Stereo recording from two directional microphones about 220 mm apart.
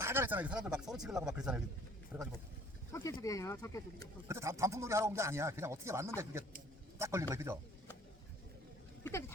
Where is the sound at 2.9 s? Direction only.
15° left (ahead or behind).